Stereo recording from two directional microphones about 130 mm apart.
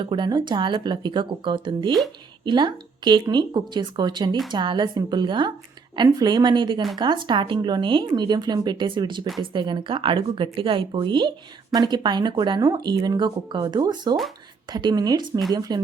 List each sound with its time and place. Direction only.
0.0 s speech: 35° right (ahead or behind)